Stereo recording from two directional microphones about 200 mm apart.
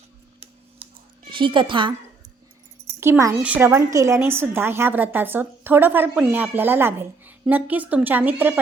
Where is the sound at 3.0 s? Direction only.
15° right (ahead or behind).